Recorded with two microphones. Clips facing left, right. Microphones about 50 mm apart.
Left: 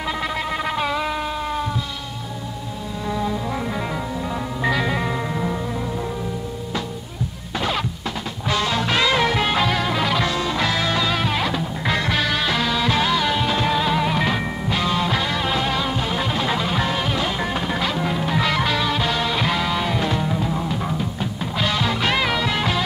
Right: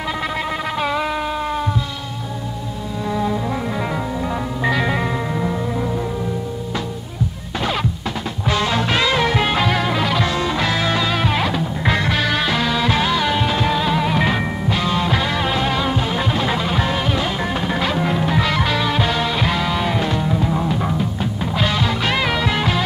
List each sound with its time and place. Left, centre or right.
0.2 s a sound: centre
3.1 s music: centre
4.6 s music: centre
8.5 s music: centre
9.0 s music: centre
10.0 s music: centre
10.3 s music: centre
14.2 s music: centre
14.7 s music: centre; by 18.2 s right
18.2 s music: centre